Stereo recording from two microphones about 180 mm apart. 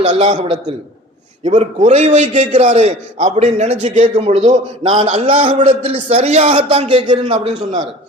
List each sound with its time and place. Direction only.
0.3 s a man's voice: 35° right (ahead or behind)